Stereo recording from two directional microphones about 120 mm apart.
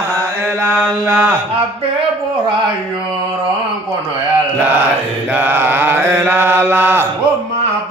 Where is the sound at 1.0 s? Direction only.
15° right (ahead or behind).